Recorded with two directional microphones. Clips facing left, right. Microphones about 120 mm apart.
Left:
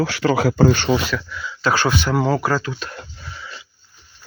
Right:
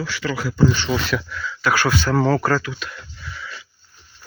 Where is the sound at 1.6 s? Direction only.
25° left (ahead or behind).